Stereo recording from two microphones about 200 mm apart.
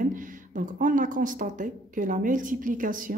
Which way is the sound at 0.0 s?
40° right (ahead or behind).